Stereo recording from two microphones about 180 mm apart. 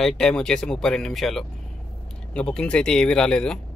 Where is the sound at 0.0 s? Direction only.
5° left (ahead or behind).